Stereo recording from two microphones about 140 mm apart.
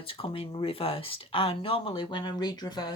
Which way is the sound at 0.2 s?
40° left (ahead or behind).